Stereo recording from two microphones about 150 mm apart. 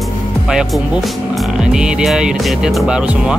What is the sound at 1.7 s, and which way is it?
Speech, 5° right (ahead or behind).